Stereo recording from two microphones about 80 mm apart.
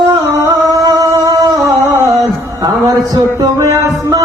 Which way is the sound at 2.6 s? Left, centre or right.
Right.